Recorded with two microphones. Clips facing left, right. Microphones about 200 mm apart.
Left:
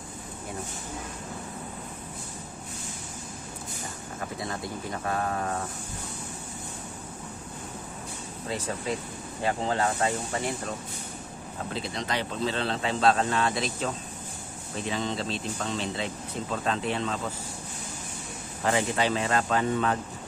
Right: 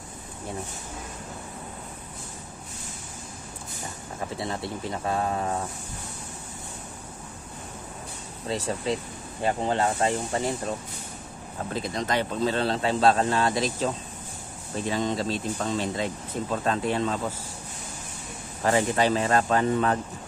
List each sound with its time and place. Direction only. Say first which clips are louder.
4.4 s speech: right 3 dB; 25° right (ahead or behind)
8.5 s speech: right 4 dB; 30° right (ahead or behind)
9.6 s speech: right 2 dB; 20° right (ahead or behind)
11.7 s speech: right 4 dB; 45° right (ahead or behind)
14.9 s speech: right 4 dB; 40° right (ahead or behind)
18.7 s speech: right 3 dB; 40° right (ahead or behind)